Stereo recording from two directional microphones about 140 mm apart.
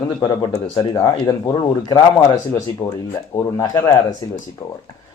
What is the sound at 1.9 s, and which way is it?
Speech, 25° left (ahead or behind).